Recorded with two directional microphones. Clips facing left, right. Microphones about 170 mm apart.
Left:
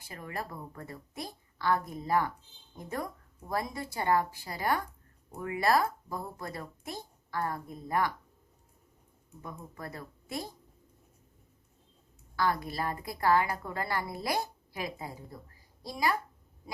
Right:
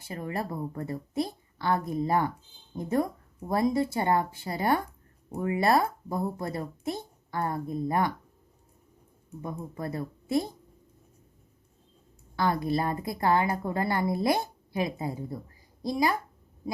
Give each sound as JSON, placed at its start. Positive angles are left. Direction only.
{"t": 0.1, "sound": "a woman's voice", "side_deg": -25}
{"t": 9.4, "sound": "a woman's voice", "side_deg": -25}
{"t": 12.4, "sound": "a woman's voice", "side_deg": -25}